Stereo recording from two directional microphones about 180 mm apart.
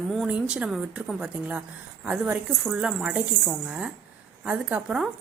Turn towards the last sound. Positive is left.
turn(degrees=-5)  # may be behind; listen again after turning